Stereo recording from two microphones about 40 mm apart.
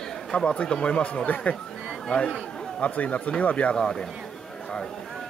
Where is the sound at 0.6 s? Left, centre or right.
Left.